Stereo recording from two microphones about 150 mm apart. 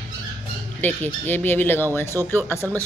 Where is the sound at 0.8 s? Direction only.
10° left (ahead or behind).